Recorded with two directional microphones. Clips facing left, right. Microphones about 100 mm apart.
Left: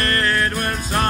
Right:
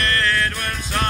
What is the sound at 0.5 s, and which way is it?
Music, 45° left (ahead or behind).